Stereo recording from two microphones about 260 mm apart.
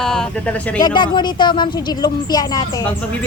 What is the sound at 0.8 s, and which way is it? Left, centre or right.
Speech, centre.